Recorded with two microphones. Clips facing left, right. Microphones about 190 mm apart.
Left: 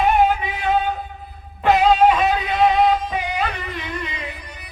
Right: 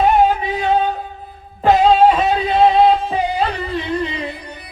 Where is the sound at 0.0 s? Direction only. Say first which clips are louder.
Right 3 dB; 35° right (ahead or behind).